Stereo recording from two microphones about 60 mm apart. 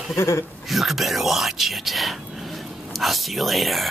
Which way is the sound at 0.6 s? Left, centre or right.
Centre.